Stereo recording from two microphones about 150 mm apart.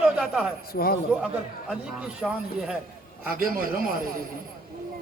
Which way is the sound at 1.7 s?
5° right (ahead or behind).